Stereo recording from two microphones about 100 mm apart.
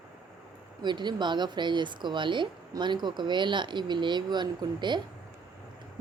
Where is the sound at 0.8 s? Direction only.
50° right (ahead or behind).